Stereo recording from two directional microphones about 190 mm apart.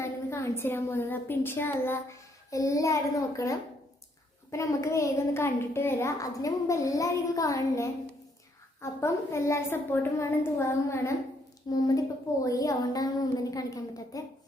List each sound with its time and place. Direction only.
0.0 s a woman's voice: 15° left (ahead or behind)
4.5 s a child's voice: 15° left (ahead or behind)